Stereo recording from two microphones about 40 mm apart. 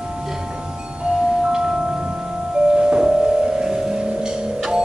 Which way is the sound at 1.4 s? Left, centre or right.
Centre.